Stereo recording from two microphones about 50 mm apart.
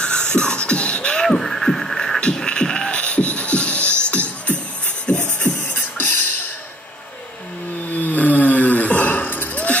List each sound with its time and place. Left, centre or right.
0.0 s beatboxing: centre
1.2 s beatboxing: centre
2.1 s music: centre
5.7 s music: left
7.9 s a sound: left